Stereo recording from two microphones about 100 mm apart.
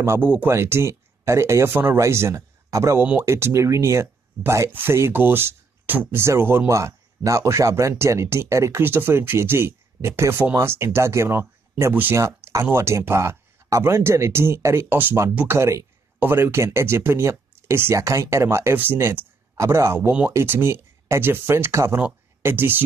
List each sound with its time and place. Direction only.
0.0 s speech: 25° right (ahead or behind)